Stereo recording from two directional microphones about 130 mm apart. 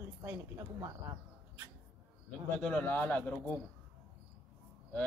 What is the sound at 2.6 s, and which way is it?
Speech, 10° left (ahead or behind).